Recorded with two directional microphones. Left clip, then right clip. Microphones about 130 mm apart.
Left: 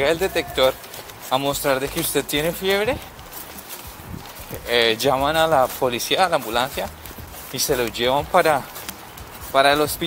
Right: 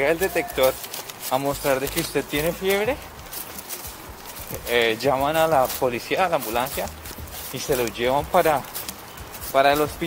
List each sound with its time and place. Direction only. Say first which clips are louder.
0.0 s speech: left 1 dB; 25° left (ahead or behind)
4.6 s speech: left 2 dB; 30° left (ahead or behind)